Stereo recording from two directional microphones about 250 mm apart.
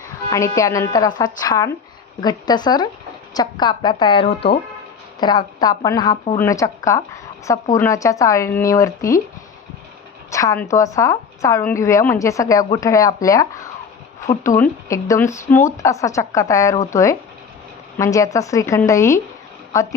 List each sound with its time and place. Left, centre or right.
0.3 s a woman's voice: centre
10.3 s a woman's voice: centre